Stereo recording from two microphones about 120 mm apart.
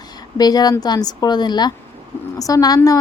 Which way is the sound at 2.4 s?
30° left (ahead or behind).